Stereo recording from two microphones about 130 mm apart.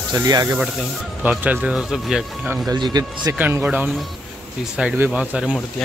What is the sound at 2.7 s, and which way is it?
Speech, 30° right (ahead or behind).